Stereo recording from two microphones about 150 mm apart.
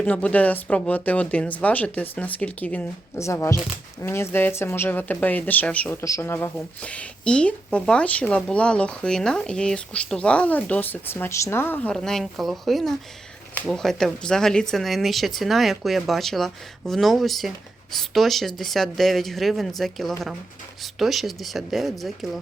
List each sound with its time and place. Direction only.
0.0 s speech: 10° left (ahead or behind)